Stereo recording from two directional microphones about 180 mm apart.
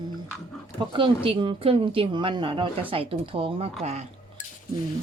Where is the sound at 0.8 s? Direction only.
30° right (ahead or behind).